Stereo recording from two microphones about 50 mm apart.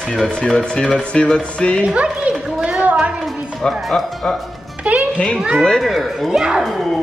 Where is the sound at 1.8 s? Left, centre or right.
Right.